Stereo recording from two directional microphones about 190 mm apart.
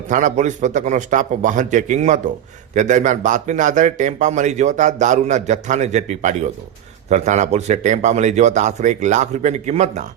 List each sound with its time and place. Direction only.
0.1 s speech: 40° right (ahead or behind)